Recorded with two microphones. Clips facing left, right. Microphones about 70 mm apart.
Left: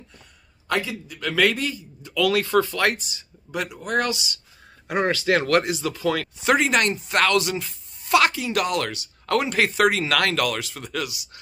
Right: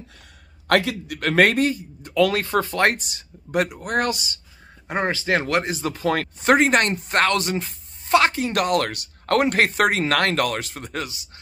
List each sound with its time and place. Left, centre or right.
0.7 s a man's voice: right
4.8 s speech: right